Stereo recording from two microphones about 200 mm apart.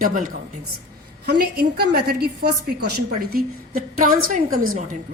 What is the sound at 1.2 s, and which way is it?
A woman's voice, 50° right (ahead or behind).